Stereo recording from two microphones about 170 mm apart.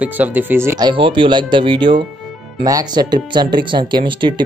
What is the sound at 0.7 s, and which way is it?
Speech, 30° right (ahead or behind).